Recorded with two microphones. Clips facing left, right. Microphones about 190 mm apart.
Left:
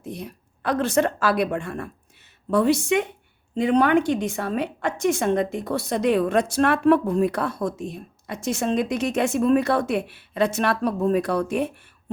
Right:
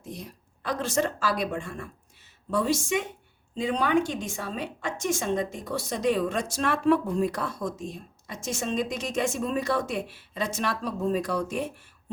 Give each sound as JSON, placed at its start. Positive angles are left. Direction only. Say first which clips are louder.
{"t": 0.0, "sound": "a woman's voice", "louder": "left 6 dB", "side_deg": 60}